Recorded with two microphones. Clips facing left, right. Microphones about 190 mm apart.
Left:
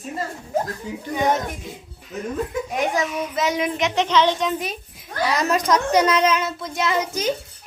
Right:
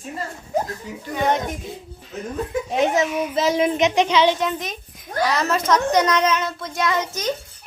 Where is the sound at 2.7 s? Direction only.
25° right (ahead or behind); by 4.5 s 10° right (ahead or behind).